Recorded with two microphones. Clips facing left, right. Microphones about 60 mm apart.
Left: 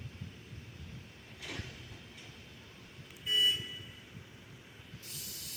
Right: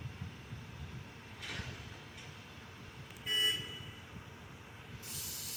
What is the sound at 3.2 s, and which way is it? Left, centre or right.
Vehicle, right.